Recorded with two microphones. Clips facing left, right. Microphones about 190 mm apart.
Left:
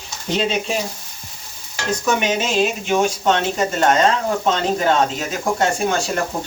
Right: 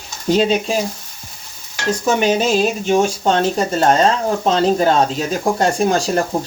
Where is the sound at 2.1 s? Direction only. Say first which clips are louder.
Right 5 dB; 35° right (ahead or behind).